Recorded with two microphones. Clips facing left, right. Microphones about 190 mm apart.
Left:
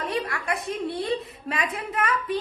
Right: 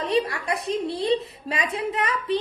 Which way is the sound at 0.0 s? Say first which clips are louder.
Right 5 dB; 25° right (ahead or behind).